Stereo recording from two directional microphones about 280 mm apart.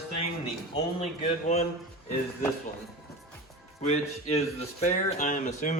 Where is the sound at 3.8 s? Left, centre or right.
Left.